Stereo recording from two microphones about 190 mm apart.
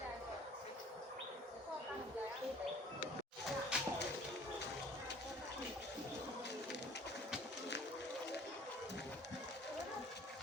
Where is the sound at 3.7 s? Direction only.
5° right (ahead or behind).